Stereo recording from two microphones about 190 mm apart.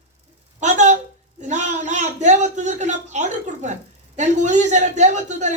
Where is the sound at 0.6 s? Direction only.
40° right (ahead or behind).